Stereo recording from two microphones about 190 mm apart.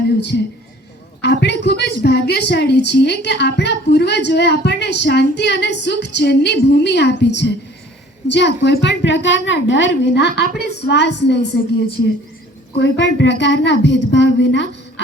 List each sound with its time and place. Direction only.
0.2 s a woman's voice: 65° left (ahead or behind)
12.7 s a woman's voice: 65° left (ahead or behind)